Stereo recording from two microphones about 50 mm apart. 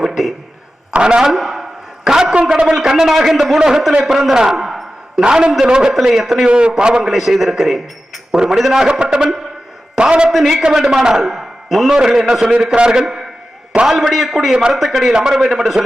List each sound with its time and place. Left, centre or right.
0.0 s a sound: centre
0.9 s a man's voice: centre
1.3 s a sound: centre
2.0 s a man's voice: centre
4.0 s a sound: centre
5.2 s a man's voice: centre
5.9 s a man's voice: centre
6.5 s a man's voice: right
7.0 s a man's voice: centre
8.9 s a man's voice: centre
10.2 s a man's voice: centre
14.5 s a man's voice: centre
14.8 s a man's voice: centre